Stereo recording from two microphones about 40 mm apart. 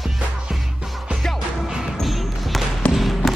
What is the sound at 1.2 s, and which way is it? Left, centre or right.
Music, centre.